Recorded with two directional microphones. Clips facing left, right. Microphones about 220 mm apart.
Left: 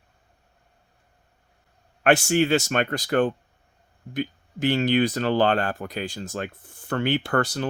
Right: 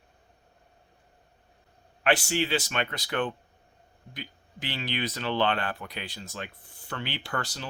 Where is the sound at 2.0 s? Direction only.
50° left (ahead or behind).